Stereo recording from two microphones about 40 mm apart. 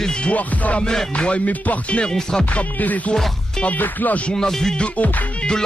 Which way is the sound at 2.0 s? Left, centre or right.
Centre.